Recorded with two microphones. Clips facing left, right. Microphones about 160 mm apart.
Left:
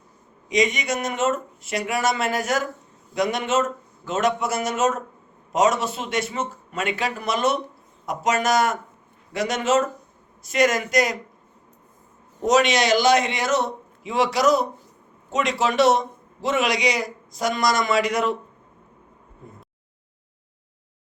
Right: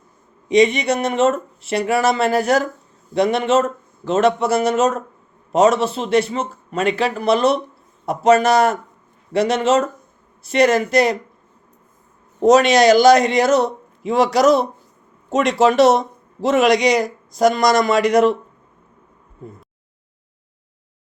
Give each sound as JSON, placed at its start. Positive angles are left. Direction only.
{"t": 0.4, "sound": "speech", "side_deg": -30}
{"t": 12.5, "sound": "a man's voice", "side_deg": -40}